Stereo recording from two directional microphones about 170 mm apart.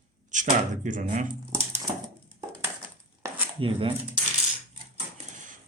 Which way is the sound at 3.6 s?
30° right (ahead or behind).